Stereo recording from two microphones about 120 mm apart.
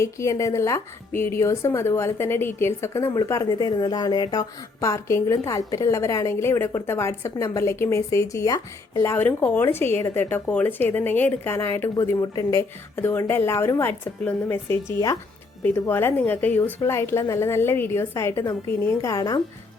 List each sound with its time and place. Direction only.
0.0 s a woman's voice: 25° left (ahead or behind)